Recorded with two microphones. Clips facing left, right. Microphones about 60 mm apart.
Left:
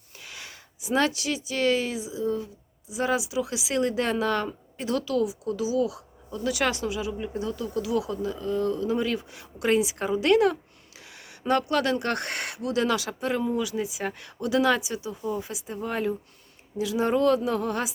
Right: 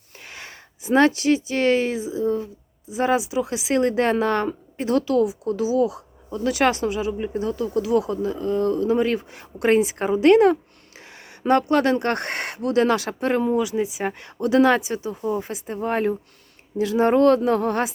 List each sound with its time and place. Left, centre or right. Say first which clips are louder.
0.2 s speech: right 3 dB; right
13.6 s speech: right 6 dB; right